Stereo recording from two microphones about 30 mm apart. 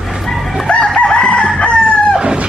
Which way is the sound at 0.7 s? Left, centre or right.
Left.